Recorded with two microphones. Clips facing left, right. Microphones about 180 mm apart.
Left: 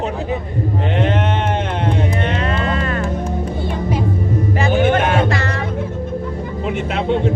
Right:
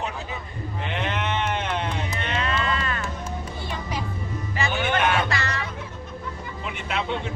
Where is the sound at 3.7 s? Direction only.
50° left (ahead or behind).